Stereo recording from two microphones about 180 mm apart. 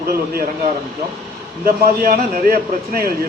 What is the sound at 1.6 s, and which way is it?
Speech, 55° right (ahead or behind).